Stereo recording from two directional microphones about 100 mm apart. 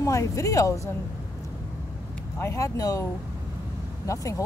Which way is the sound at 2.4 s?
30° left (ahead or behind).